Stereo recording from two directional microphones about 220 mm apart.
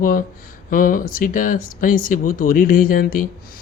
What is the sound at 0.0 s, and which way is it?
Speech, 40° left (ahead or behind).